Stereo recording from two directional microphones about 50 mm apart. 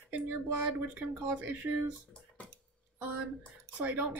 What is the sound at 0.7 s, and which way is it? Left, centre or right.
Speech, right.